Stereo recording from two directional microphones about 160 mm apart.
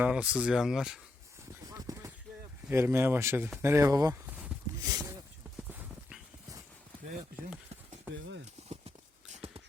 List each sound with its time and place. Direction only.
0.0 s speech: 5° right (ahead or behind)
1.7 s chopping: 20° right (ahead or behind)
2.6 s speech: 15° right (ahead or behind)
4.3 s a sound: 10° right (ahead or behind)
4.8 s speech: 20° right (ahead or behind)
5.6 s clip-clop: 10° right (ahead or behind)